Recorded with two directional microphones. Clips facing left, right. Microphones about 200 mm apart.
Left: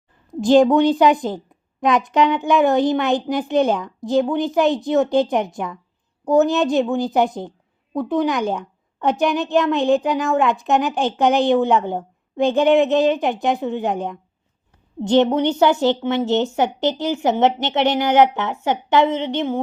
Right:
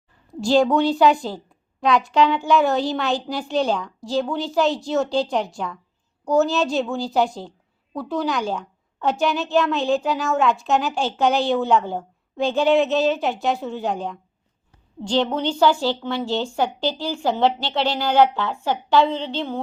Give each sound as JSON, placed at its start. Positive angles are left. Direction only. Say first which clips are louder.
{"t": 0.3, "sound": "a woman's voice", "louder": "left 4 dB", "side_deg": 20}